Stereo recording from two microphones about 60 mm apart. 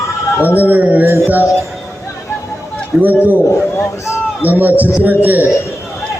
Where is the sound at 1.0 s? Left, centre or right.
Right.